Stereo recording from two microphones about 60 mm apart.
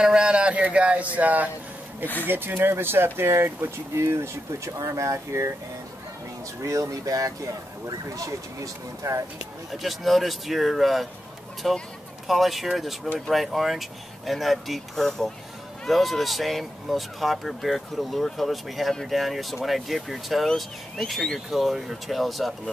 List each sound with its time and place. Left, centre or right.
0.0 s a sound: centre
1.1 s speech: right
6.6 s speech: right
9.7 s speech: centre